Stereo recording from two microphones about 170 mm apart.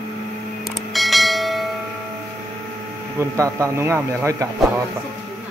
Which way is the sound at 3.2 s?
20° right (ahead or behind).